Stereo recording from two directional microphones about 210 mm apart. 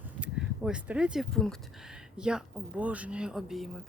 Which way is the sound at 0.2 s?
5° right (ahead or behind).